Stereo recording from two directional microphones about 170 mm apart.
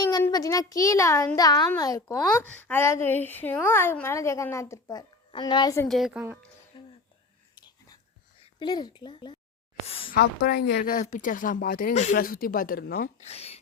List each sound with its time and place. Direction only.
0.0 s a child's voice: 20° left (ahead or behind)
2.1 s speech: 10° left (ahead or behind)
5.9 s a woman's voice: centre (ahead or behind)
6.7 s music: 30° left (ahead or behind)
7.5 s whispering: 25° left (ahead or behind)
8.4 s a woman's voice: 25° left (ahead or behind)
9.8 s a sound: 35° left (ahead or behind)
10.2 s speech: 70° left (ahead or behind); by 12.1 s 45° left (ahead or behind)
12.1 s speech: 60° left (ahead or behind)
13.2 s speech: 35° left (ahead or behind)